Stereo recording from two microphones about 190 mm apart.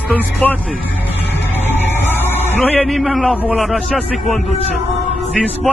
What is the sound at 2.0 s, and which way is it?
A man's voice, 10° left (ahead or behind).